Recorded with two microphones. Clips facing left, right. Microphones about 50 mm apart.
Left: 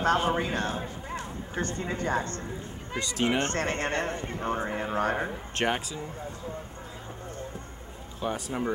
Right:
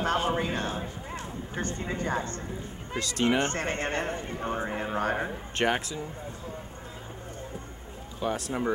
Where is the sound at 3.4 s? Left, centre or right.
Centre.